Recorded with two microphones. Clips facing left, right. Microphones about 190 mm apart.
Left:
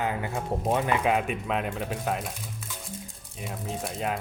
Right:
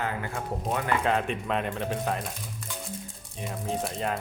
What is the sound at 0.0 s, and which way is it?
Speech, 20° left (ahead or behind).